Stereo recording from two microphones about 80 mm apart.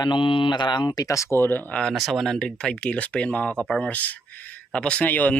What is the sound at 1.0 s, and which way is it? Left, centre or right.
Speech, left.